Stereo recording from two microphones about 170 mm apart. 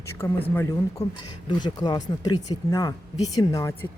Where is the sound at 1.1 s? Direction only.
25° left (ahead or behind).